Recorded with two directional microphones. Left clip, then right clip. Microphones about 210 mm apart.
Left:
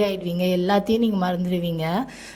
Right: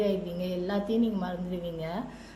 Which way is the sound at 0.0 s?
50° left (ahead or behind).